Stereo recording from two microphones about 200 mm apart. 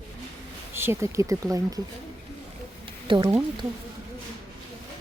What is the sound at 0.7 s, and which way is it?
Speech, 10° right (ahead or behind).